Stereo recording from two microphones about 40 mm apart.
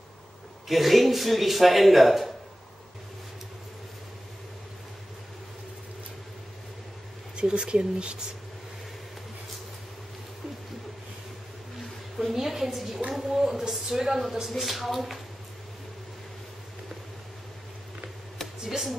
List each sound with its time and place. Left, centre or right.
0.7 s speech: centre
7.3 s speech: right
12.2 s a woman's voice: centre
18.6 s speech: centre